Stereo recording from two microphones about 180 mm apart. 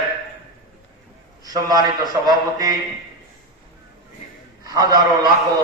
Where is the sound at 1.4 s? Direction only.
20° right (ahead or behind).